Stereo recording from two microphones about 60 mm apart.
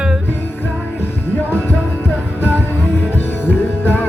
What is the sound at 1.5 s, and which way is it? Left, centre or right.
Music, left.